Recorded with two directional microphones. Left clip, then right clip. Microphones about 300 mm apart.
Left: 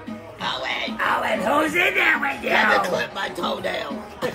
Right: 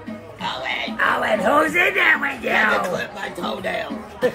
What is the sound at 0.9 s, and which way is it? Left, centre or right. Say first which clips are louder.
Speech: right 4 dB; centre.